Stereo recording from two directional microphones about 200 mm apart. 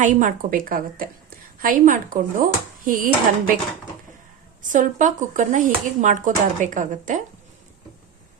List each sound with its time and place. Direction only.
0.0 s speech: 40° right (ahead or behind)
4.6 s speech: 40° right (ahead or behind)